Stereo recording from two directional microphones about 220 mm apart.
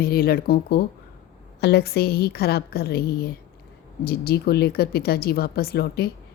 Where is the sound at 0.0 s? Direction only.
45° left (ahead or behind).